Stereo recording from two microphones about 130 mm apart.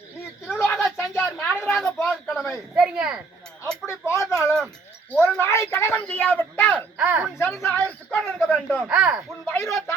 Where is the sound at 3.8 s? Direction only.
20° left (ahead or behind).